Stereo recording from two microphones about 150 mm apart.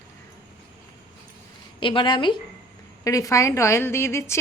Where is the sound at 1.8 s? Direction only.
35° left (ahead or behind).